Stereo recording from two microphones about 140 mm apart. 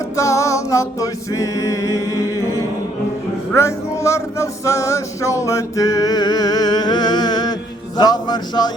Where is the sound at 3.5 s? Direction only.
20° left (ahead or behind).